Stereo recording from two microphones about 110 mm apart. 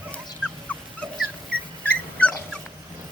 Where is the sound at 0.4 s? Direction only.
15° left (ahead or behind).